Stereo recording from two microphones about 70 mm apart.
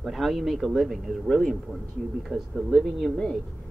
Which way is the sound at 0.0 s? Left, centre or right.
Centre.